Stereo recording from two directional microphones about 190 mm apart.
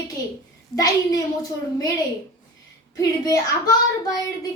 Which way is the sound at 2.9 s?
20° left (ahead or behind).